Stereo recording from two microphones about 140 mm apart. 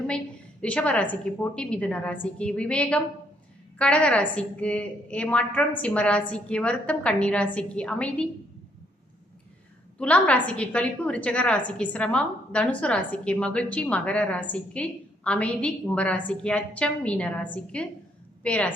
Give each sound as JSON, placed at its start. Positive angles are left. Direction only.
{"t": 0.6, "sound": "a woman's voice", "side_deg": 10}
{"t": 10.0, "sound": "a woman's voice", "side_deg": 10}